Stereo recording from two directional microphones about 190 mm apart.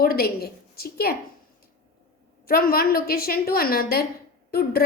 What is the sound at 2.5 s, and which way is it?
A woman's voice, 50° left (ahead or behind).